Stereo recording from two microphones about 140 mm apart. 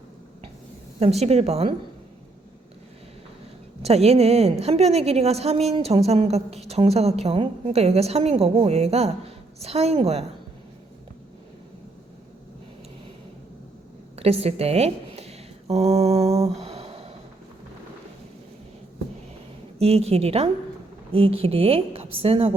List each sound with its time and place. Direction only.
0.9 s a woman's voice: 50° right (ahead or behind)
3.8 s a woman's voice: 50° right (ahead or behind)
14.2 s a sound: 45° right (ahead or behind)
19.8 s a woman's voice: 45° right (ahead or behind)